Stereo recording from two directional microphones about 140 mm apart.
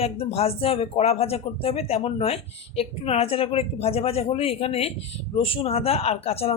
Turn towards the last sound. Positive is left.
turn(degrees=45)  # may be behind; listen again after turning